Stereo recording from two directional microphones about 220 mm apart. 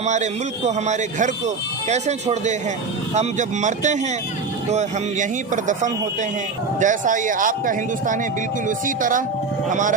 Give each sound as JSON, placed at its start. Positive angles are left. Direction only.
{"t": 0.0, "sound": "speech", "side_deg": -30}